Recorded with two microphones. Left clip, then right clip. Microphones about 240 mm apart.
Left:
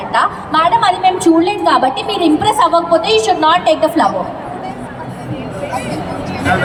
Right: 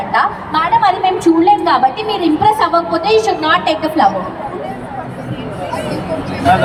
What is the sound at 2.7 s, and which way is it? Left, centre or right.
Speech, centre.